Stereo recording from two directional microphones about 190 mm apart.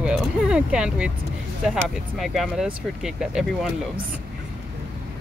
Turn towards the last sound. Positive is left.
turn(degrees=-5)  # may be behind; listen again after turning